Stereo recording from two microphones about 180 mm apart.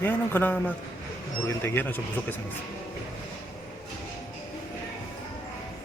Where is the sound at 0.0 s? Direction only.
10° left (ahead or behind).